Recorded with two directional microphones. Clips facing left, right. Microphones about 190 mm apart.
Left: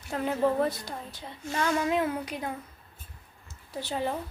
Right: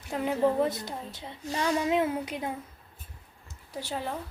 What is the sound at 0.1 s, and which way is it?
A woman's voice, 15° right (ahead or behind).